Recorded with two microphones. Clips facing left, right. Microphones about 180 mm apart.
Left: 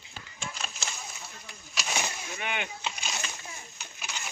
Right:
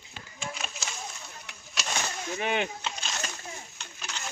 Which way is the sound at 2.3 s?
35° right (ahead or behind).